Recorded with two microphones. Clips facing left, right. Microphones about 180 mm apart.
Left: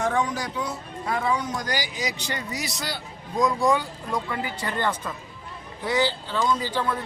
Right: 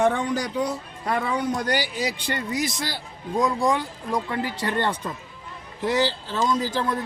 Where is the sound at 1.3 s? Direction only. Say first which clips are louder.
Right 3 dB; 60° right (ahead or behind).